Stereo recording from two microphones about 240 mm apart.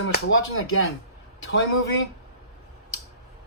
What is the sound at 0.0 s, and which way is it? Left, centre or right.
Speech, left.